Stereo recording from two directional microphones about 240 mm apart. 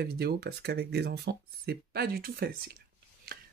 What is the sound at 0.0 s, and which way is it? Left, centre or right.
Speech, right.